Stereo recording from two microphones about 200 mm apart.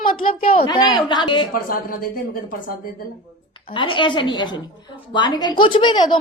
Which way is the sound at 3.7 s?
25° left (ahead or behind).